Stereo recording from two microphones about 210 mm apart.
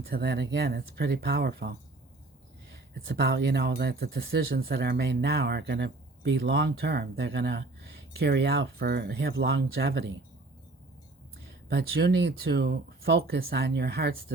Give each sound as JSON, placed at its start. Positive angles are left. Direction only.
{"t": 0.1, "sound": "speech", "side_deg": -50}
{"t": 11.7, "sound": "speech", "side_deg": -50}